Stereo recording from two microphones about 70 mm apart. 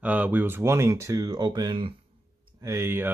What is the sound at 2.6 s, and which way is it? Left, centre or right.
Speech, right.